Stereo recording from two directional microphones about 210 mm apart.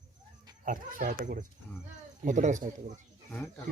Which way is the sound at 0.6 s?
40° right (ahead or behind).